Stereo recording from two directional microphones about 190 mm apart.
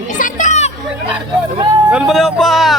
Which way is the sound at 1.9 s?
5° right (ahead or behind).